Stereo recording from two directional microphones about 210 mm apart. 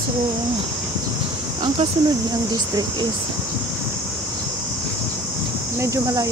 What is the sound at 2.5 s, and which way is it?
Speech, 20° right (ahead or behind).